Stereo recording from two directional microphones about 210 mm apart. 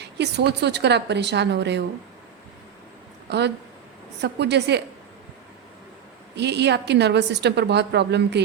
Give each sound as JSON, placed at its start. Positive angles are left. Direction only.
{"t": 0.0, "sound": "a woman's voice", "side_deg": -55}
{"t": 3.2, "sound": "a woman's voice", "side_deg": -55}
{"t": 6.3, "sound": "a woman's voice", "side_deg": -55}